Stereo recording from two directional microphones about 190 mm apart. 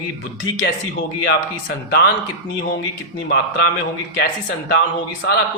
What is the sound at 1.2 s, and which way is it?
Speech, 65° left (ahead or behind).